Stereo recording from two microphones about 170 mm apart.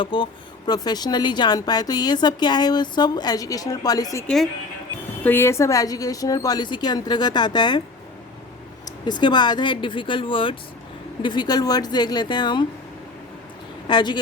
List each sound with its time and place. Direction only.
0.0 s speech: 30° left (ahead or behind)
8.8 s speech: 25° left (ahead or behind)
13.8 s speech: 25° left (ahead or behind)